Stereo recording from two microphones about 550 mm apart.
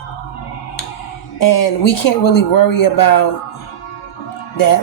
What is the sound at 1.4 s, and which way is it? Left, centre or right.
Speech, left.